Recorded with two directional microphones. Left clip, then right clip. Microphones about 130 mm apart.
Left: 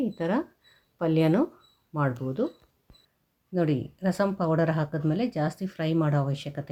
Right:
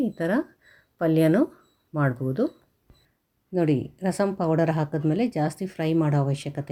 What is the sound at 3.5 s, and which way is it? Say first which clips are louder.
Speech: right 3 dB; 20° right (ahead or behind).